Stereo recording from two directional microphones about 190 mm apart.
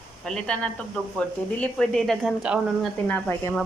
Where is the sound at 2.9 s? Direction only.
10° left (ahead or behind).